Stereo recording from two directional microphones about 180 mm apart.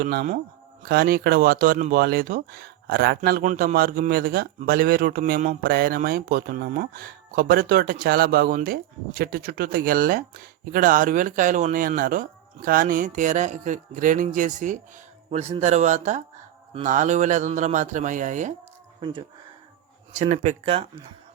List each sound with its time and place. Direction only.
0.0 s a man's voice: 50° right (ahead or behind)
3.2 s a man's voice: 50° right (ahead or behind)
20.1 s speech: 40° right (ahead or behind)